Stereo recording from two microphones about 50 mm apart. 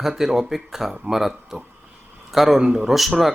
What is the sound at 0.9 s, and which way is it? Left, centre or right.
Speech, centre.